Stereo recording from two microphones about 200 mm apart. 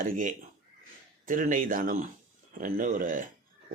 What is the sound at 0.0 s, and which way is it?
Speech, 40° right (ahead or behind).